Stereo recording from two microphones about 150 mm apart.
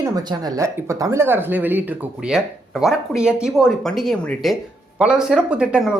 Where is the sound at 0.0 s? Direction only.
25° right (ahead or behind).